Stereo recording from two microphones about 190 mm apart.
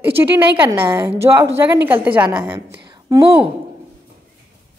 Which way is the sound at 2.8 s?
20° right (ahead or behind).